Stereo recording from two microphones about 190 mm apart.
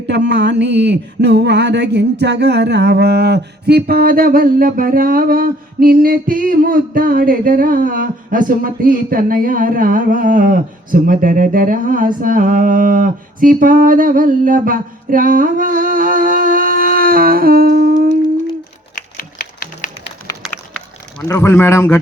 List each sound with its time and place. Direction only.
0.1 s a sound: 60° right (ahead or behind)
18.9 s typewriter: 45° left (ahead or behind)
21.2 s speech: 15° left (ahead or behind)